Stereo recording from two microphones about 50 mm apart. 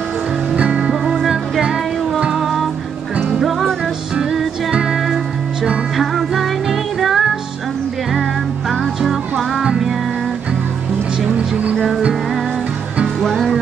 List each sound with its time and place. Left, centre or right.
0.6 s music: right; by 3.7 s centre
4.9 s music: centre
9.6 s music: centre
11.7 s music: centre
13.2 s music: centre